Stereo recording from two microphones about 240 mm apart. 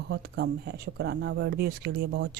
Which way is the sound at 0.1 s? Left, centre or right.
Right.